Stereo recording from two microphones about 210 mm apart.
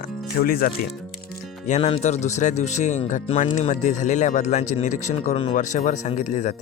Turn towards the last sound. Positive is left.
turn(degrees=35)  # may be behind; listen again after turning